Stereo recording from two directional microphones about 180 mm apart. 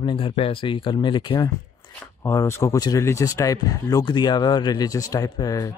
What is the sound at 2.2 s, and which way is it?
Speech, 15° left (ahead or behind).